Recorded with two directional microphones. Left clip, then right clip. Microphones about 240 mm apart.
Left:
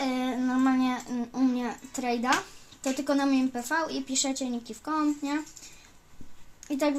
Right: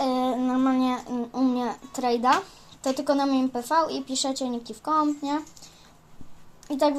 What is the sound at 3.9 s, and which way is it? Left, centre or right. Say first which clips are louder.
Speech: right 2 dB; left.